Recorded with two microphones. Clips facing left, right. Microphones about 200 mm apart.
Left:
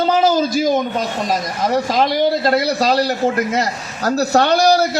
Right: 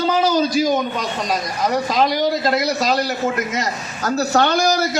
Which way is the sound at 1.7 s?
25° left (ahead or behind).